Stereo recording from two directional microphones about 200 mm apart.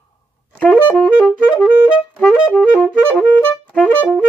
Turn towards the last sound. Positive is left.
turn(degrees=5)  # may be behind; listen again after turning